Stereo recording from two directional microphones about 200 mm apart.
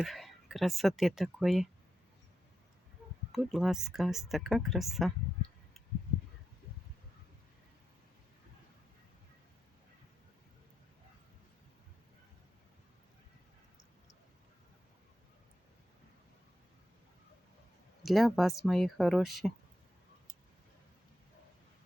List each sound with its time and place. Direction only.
0.0 s speech: centre (ahead or behind)
3.3 s speech: centre (ahead or behind)
18.0 s speech: centre (ahead or behind)